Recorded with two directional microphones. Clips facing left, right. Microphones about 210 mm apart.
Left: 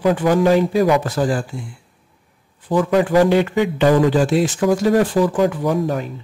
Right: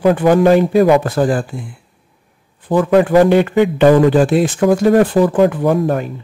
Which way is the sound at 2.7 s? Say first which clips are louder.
Right 4 dB; 55° right (ahead or behind).